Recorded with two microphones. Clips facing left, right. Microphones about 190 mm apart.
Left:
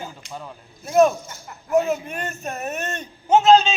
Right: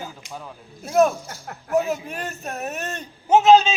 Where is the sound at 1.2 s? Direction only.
65° right (ahead or behind).